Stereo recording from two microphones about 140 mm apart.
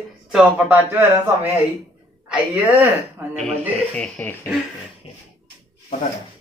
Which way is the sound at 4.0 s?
10° left (ahead or behind).